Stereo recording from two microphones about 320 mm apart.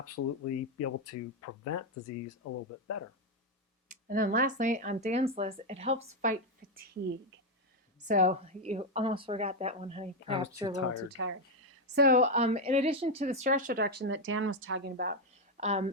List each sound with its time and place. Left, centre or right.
0.0 s speech: left
3.8 s a woman's voice: right
8.0 s a woman's voice: right
11.2 s speech: right
11.9 s a woman's voice: right